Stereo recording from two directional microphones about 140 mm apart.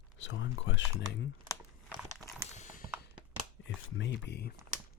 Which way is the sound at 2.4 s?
60° left (ahead or behind).